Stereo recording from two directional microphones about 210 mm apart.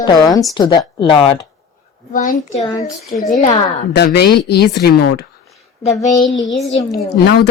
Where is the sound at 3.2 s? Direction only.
35° left (ahead or behind).